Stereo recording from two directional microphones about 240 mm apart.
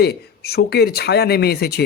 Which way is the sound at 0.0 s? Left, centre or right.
Left.